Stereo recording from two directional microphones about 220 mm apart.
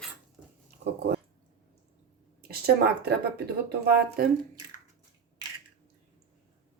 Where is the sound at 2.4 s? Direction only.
45° right (ahead or behind).